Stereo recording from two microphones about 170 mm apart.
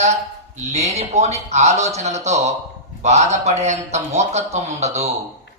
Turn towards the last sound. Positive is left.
turn(degrees=-40)  # may be behind; listen again after turning